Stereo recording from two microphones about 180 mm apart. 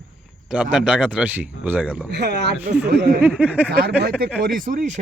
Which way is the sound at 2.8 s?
60° right (ahead or behind).